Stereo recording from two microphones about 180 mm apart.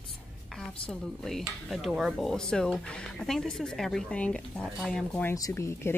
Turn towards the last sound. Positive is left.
turn(degrees=15)  # may be behind; listen again after turning